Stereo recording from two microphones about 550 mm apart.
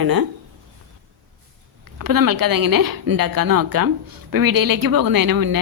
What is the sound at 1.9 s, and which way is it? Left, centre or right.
A woman's voice, right.